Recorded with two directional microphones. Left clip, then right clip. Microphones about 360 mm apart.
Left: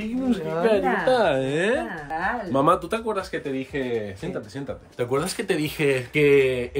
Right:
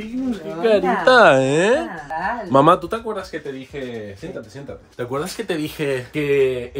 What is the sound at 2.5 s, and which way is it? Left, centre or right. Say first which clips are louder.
Speech: right 7 dB; right.